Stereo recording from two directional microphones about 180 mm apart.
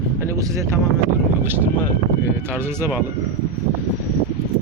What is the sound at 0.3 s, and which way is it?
Speech, 15° right (ahead or behind).